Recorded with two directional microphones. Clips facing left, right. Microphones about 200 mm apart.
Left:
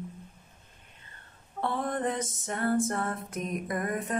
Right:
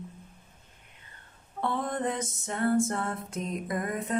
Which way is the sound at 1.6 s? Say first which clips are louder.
Even; 20° right (ahead or behind).